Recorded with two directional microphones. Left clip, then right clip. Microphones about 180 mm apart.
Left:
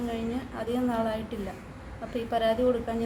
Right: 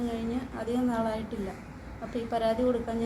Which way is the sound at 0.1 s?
5° left (ahead or behind).